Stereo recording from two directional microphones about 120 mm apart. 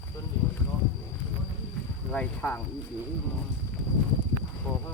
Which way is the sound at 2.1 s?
15° left (ahead or behind).